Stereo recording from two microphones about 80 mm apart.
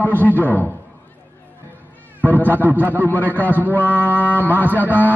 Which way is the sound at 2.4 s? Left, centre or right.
Right.